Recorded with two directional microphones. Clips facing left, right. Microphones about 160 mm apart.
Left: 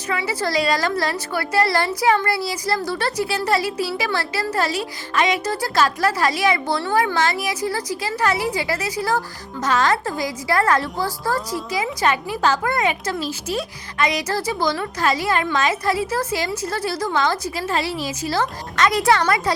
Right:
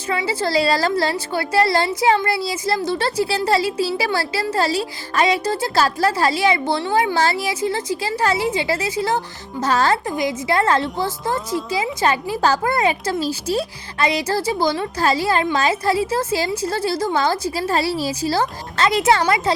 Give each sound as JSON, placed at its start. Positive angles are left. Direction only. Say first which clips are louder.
{"t": 0.1, "sound": "a woman's voice", "louder": "right 2 dB", "side_deg": -25}
{"t": 10.1, "sound": "a woman's voice", "louder": "right 2 dB", "side_deg": -20}